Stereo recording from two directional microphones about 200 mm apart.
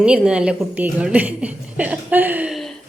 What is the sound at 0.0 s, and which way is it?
A woman's voice, 5° right (ahead or behind).